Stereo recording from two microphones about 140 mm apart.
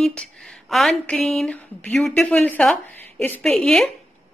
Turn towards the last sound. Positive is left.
turn(degrees=5)  # may be behind; listen again after turning